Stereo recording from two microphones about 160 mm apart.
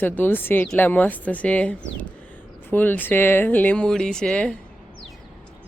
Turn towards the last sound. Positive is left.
turn(degrees=5)  # may be behind; listen again after turning